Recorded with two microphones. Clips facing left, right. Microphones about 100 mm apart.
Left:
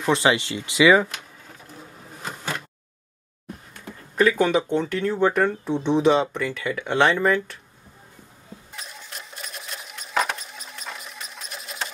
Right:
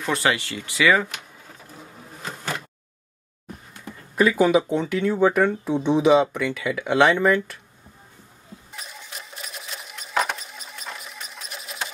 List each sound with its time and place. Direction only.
0.0 s speech: 20° left (ahead or behind)
4.1 s speech: 5° right (ahead or behind)
8.7 s sewing machine: centre (ahead or behind)